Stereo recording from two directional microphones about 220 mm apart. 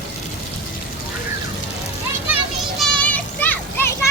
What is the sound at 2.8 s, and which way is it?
Children playing, 5° left (ahead or behind).